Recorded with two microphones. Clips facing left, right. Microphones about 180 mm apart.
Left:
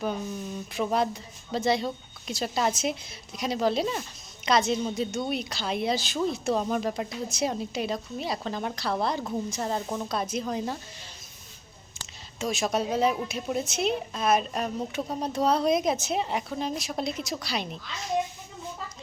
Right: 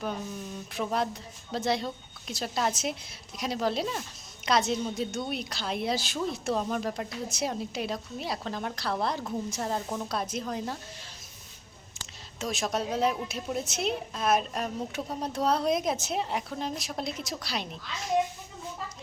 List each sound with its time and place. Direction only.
0.7 s a woman's voice: centre (ahead or behind)
12.4 s a woman's voice: centre (ahead or behind)